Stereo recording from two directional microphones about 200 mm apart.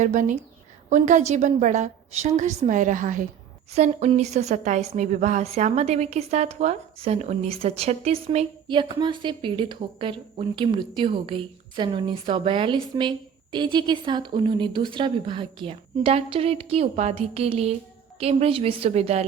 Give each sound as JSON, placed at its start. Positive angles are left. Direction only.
{"t": 0.0, "sound": "a woman's voice", "side_deg": -40}